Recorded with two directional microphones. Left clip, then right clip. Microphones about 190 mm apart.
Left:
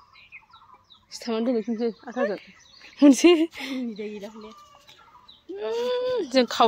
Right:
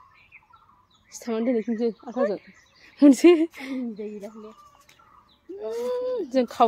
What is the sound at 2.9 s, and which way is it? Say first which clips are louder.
Speech: right 1 dB; 5° right (ahead or behind).